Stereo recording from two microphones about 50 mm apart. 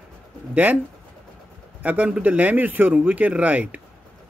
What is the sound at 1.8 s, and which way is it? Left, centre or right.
A man's voice, right.